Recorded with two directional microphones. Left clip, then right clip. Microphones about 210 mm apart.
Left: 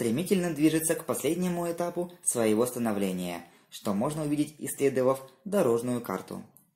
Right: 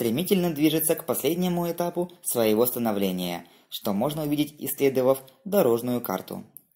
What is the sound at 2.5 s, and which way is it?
Speech, 20° right (ahead or behind).